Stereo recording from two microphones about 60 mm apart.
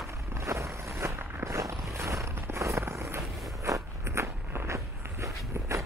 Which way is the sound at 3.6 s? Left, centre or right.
Right.